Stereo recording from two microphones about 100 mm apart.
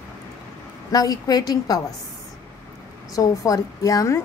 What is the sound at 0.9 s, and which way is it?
Speech, 40° left (ahead or behind).